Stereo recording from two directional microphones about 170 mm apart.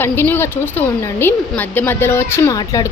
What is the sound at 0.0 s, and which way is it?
A woman's voice, 15° left (ahead or behind).